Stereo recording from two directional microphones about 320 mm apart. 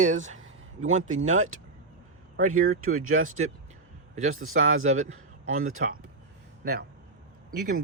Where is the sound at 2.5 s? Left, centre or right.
Right.